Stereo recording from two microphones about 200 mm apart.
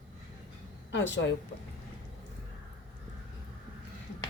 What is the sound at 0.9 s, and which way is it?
Speech, 65° left (ahead or behind).